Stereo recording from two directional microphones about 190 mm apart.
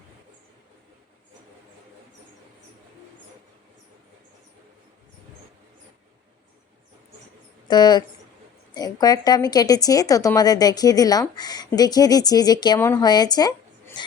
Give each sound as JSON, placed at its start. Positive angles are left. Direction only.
{"t": 7.7, "sound": "speech", "side_deg": 20}